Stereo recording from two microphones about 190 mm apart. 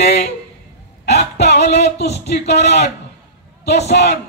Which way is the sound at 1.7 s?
35° left (ahead or behind).